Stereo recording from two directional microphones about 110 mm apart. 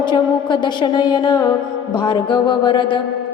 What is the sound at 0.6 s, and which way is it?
Music, 45° left (ahead or behind).